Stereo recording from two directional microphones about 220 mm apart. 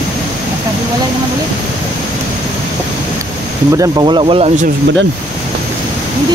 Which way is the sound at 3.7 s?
15° right (ahead or behind).